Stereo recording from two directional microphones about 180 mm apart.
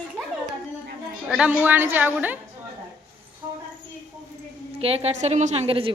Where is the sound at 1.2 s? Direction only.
5° right (ahead or behind).